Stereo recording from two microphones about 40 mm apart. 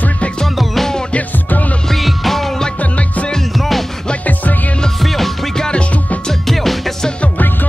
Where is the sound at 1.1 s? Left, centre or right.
Left.